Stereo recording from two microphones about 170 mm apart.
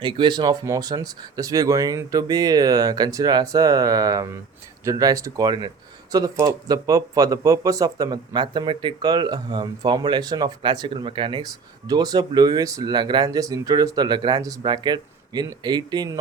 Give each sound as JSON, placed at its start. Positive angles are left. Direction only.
{"t": 0.0, "sound": "speech", "side_deg": -25}